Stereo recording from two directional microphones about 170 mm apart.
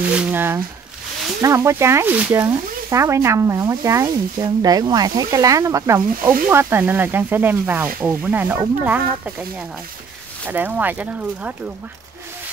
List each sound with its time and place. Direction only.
0.3 s speech: 10° right (ahead or behind)